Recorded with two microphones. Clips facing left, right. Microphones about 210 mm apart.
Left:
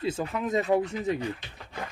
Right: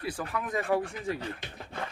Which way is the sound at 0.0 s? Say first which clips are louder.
Left 5 dB; 25° left (ahead or behind).